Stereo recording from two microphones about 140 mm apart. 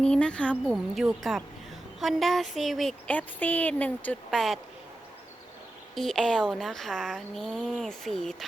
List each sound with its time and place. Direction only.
0.0 s speech: 5° left (ahead or behind)
0.5 s speech: 5° right (ahead or behind)
5.9 s speech: centre (ahead or behind)